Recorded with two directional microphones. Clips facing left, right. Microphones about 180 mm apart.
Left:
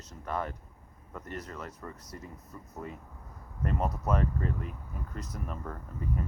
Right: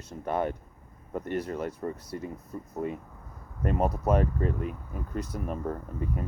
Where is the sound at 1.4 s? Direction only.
30° right (ahead or behind).